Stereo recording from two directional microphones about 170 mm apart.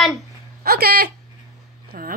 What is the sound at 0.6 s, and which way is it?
Speech, 65° right (ahead or behind).